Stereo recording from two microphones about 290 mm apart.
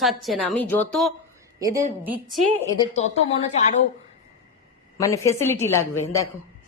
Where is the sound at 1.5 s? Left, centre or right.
Centre.